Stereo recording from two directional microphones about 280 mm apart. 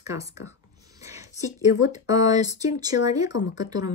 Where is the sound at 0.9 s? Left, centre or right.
Centre.